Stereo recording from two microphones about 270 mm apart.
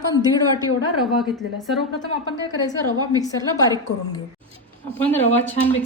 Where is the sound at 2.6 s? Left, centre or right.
Centre.